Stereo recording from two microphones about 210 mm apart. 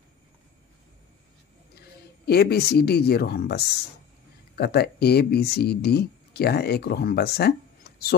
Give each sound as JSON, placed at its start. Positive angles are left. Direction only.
{"t": 2.2, "sound": "speech", "side_deg": 50}